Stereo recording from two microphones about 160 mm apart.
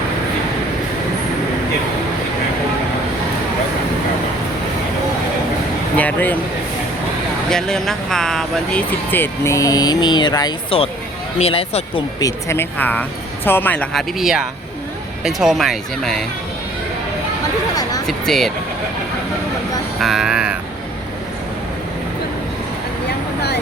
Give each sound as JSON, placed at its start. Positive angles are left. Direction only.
{"t": 6.0, "sound": "a sound", "side_deg": 10}
{"t": 7.5, "sound": "speech", "side_deg": 5}
{"t": 12.2, "sound": "speech", "side_deg": 15}
{"t": 14.2, "sound": "speech", "side_deg": -5}
{"t": 18.0, "sound": "speech", "side_deg": 0}
{"t": 20.0, "sound": "speech", "side_deg": 0}
{"t": 23.0, "sound": "vehicle", "side_deg": 90}